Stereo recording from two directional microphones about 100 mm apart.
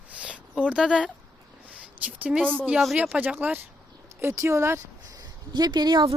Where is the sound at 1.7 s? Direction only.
15° right (ahead or behind).